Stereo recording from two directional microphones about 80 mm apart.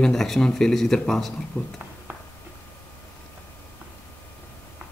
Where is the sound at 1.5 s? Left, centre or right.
Left.